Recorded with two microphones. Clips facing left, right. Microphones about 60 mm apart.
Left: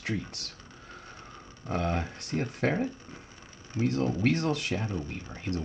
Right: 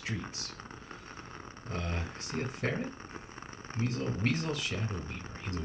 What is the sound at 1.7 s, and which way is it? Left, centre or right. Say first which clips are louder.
Speech: left 8 dB; left.